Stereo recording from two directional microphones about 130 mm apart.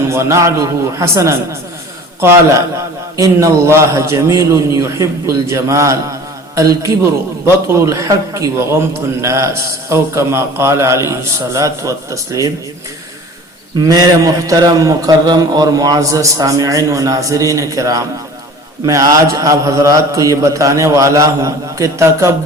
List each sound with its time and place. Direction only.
0.1 s a man's voice: 20° right (ahead or behind)
13.7 s a man's voice: 30° right (ahead or behind)